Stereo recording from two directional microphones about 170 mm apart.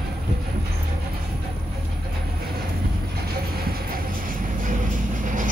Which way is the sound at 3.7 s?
55° right (ahead or behind).